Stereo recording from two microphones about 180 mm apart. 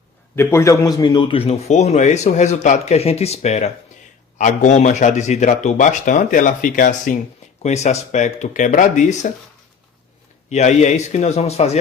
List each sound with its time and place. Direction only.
0.3 s a man's voice: 15° left (ahead or behind); by 9.1 s 45° left (ahead or behind)
10.5 s a man's voice: 40° left (ahead or behind)